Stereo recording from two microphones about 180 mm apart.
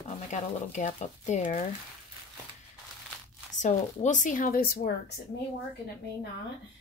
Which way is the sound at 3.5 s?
40° left (ahead or behind).